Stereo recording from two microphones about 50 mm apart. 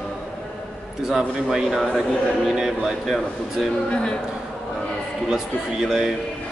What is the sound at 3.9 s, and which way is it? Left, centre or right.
Speech, centre.